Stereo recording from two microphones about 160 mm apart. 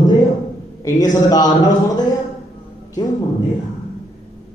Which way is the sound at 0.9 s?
25° left (ahead or behind).